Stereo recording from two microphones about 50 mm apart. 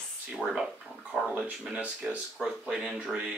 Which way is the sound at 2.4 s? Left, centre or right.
Centre.